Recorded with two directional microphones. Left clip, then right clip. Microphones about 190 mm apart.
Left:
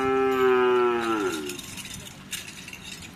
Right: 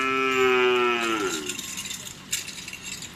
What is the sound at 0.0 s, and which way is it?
Music, 45° left (ahead or behind).